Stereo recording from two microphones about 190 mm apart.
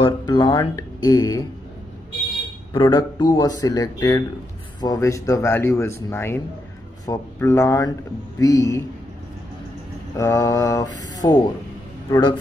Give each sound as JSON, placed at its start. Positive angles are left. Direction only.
{"t": 0.0, "sound": "speech", "side_deg": 25}
{"t": 2.7, "sound": "speech", "side_deg": 25}
{"t": 10.1, "sound": "speech", "side_deg": 15}